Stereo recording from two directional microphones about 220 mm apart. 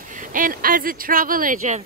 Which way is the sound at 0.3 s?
40° right (ahead or behind).